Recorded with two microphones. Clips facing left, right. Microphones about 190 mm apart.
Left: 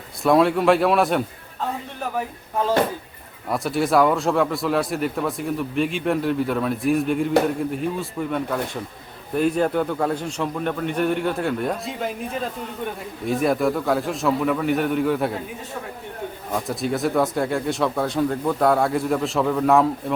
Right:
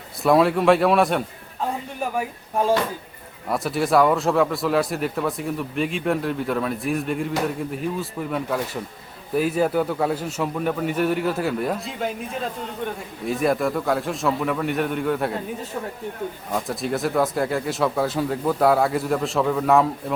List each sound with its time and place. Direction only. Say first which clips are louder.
0.2 s a man's voice: even; centre (ahead or behind)
2.0 s speech: right 1 dB; 10° right (ahead or behind)
3.5 s a man's voice: even; centre (ahead or behind)
16.5 s a man's voice: left 1 dB; centre (ahead or behind)